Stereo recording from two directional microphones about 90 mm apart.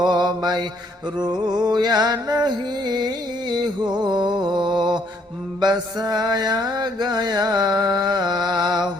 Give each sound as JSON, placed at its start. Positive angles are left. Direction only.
{"t": 0.1, "sound": "mantra", "side_deg": -50}